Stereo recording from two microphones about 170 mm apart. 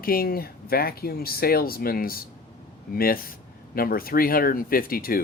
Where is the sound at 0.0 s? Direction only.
60° left (ahead or behind).